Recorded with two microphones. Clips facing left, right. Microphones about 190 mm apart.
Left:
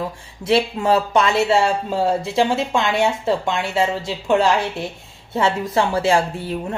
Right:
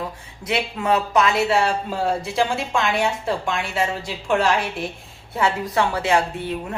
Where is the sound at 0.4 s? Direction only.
30° left (ahead or behind).